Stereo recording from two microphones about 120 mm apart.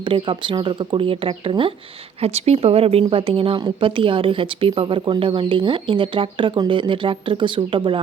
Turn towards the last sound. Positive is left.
turn(degrees=-45)  # may be behind; listen again after turning